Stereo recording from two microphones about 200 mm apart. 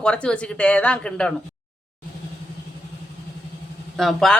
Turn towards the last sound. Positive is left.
turn(degrees=0)  # may be behind; listen again after turning